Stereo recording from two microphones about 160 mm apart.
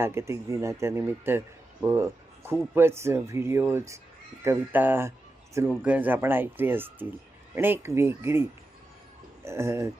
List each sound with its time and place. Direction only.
0.0 s a man's voice: 15° right (ahead or behind)